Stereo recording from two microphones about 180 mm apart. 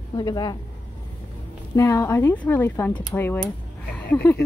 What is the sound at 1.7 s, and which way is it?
A woman's voice, 15° left (ahead or behind).